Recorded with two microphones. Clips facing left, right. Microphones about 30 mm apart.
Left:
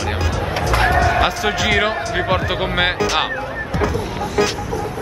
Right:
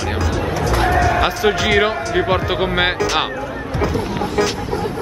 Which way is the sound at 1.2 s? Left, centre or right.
Centre.